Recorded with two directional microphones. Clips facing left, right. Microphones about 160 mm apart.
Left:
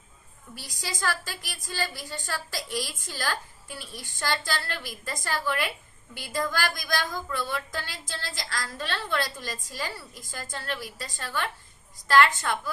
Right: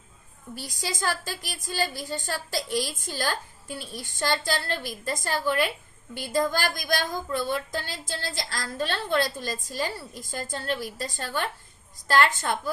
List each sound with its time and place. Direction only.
0.5 s speech: 25° right (ahead or behind)